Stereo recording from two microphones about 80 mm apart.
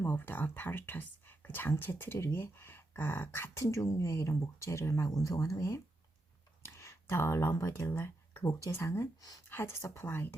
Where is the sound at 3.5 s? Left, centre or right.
Left.